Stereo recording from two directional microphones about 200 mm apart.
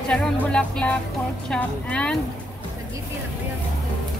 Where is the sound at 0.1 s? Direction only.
5° left (ahead or behind).